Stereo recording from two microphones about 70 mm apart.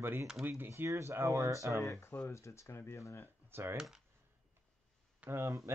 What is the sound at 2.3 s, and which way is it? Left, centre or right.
Speech, left.